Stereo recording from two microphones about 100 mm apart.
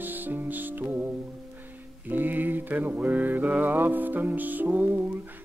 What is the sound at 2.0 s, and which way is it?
Speech, 20° right (ahead or behind).